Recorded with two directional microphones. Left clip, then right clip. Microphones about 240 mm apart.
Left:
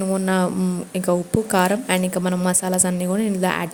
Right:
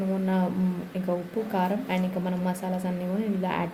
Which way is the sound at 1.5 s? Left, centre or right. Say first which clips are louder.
Left 9 dB; left.